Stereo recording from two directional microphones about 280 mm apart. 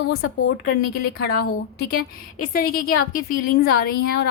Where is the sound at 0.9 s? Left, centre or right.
Left.